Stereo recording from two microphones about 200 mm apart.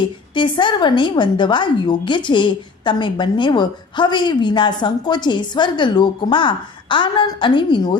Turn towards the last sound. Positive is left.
turn(degrees=25)  # may be behind; listen again after turning